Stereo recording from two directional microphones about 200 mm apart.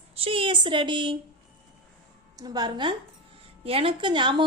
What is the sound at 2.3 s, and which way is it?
A woman's voice, 20° right (ahead or behind).